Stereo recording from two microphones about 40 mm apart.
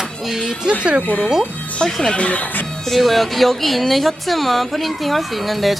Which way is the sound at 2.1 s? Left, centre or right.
Left.